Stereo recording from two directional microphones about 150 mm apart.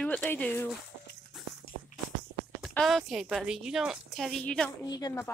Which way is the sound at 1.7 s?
75° left (ahead or behind).